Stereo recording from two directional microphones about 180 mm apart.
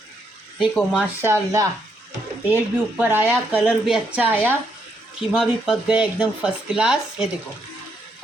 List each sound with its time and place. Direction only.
0.6 s speech: centre (ahead or behind)
1.2 s a woman's voice: 15° right (ahead or behind)